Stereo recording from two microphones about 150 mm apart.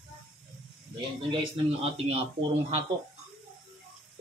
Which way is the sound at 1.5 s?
40° right (ahead or behind).